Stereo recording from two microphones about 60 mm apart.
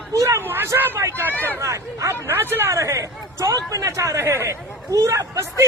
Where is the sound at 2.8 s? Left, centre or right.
Right.